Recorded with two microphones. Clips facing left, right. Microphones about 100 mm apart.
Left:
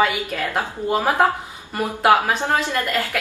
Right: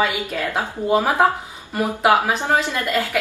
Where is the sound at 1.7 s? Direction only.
5° right (ahead or behind).